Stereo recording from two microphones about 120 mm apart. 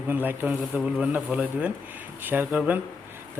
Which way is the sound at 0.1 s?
15° right (ahead or behind).